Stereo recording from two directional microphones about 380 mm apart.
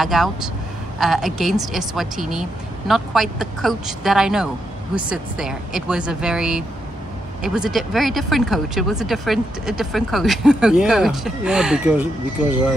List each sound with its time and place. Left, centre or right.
0.0 s speech: centre